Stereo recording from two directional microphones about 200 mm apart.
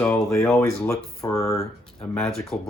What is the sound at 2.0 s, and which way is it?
Speech, 5° left (ahead or behind).